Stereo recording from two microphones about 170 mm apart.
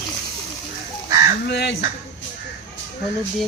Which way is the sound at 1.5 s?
90° left.